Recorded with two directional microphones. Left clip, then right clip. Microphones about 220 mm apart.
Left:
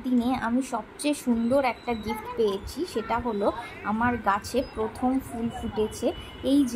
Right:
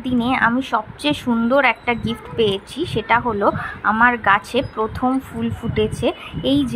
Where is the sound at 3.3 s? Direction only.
25° right (ahead or behind).